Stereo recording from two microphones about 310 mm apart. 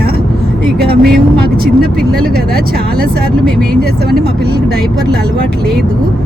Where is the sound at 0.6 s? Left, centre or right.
Right.